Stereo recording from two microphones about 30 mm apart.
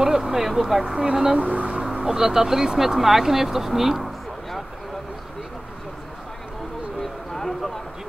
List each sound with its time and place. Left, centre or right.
0.0 s speech: centre
1.5 s speech: right
2.0 s speech: centre
3.0 s speech: centre
7.0 s a sound: centre